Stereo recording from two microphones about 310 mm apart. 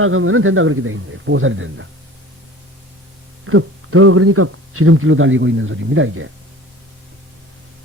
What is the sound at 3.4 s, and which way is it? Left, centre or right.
A man's voice, right.